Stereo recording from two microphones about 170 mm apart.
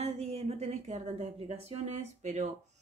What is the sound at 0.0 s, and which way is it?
A woman's voice, 35° right (ahead or behind).